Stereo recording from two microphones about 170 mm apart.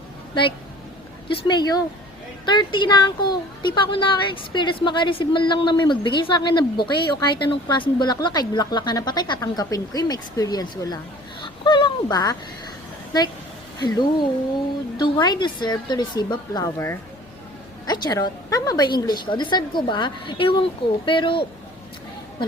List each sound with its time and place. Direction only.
1.5 s speech: 25° left (ahead or behind)